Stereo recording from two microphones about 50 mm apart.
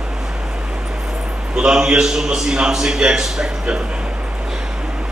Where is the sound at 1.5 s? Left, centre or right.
Centre.